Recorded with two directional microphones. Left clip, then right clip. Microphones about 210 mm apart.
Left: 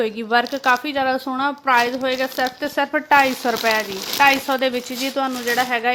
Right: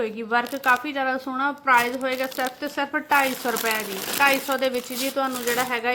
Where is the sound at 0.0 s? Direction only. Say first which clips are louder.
Left 5 dB; 40° left (ahead or behind).